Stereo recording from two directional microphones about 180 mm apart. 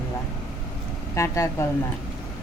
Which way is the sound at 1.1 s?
15° left (ahead or behind).